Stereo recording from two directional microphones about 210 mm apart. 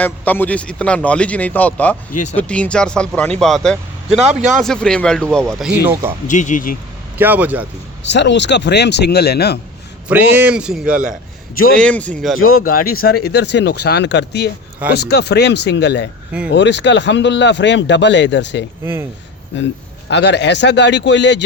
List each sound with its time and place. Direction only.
0.0 s speech: 10° left (ahead or behind); by 6.1 s 10° right (ahead or behind)
6.2 s speech: 35° left (ahead or behind)
7.2 s a man's voice: 10° right (ahead or behind)
8.0 s speech: 55° left (ahead or behind)
10.1 s a man's voice: 10° right (ahead or behind)
12.4 s speech: 80° left
13.1 s speech: 50° left (ahead or behind)
20.1 s speech: 55° left (ahead or behind)